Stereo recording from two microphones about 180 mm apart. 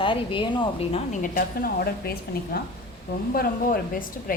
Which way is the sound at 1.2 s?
55° left (ahead or behind).